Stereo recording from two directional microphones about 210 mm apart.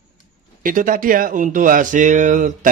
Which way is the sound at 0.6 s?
40° right (ahead or behind).